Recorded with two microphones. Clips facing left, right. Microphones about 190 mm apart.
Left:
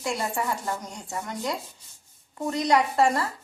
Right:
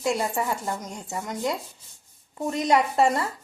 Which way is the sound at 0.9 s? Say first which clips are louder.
Right 1 dB; 20° right (ahead or behind).